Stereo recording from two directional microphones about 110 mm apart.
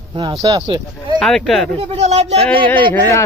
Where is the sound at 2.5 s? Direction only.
50° right (ahead or behind).